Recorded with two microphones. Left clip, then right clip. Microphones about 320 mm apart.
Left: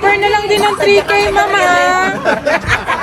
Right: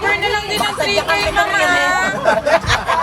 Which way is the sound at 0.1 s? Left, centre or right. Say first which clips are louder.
Left 6 dB; right.